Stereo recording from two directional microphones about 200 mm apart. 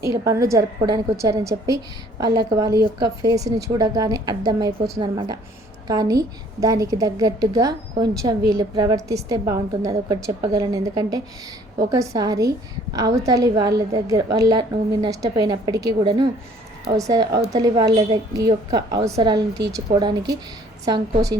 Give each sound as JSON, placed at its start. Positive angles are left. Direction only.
{"t": 0.0, "sound": "a woman's voice", "side_deg": -15}